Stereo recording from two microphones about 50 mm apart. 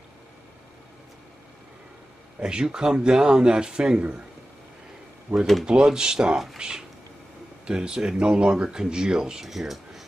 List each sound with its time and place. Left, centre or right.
2.4 s speech: centre
5.3 s speech: right
7.6 s speech: centre